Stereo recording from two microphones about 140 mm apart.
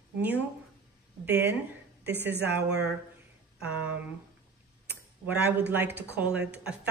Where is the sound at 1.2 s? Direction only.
15° right (ahead or behind).